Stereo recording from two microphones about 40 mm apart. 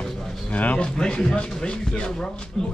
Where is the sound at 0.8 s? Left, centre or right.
Left.